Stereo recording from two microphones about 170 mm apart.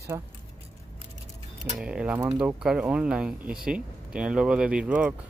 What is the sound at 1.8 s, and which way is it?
Speech, 5° right (ahead or behind).